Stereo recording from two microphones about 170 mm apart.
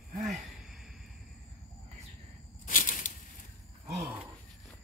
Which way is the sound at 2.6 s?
55° left (ahead or behind).